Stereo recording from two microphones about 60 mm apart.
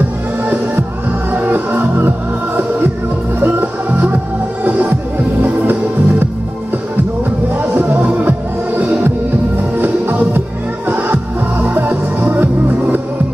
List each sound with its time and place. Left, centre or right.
1.3 s music: right
7.5 s music: right